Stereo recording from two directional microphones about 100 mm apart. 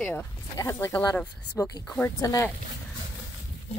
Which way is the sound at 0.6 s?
30° left (ahead or behind).